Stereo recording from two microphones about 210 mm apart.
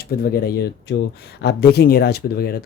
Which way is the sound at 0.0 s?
45° left (ahead or behind).